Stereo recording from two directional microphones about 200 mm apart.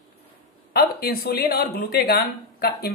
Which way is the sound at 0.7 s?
50° left (ahead or behind).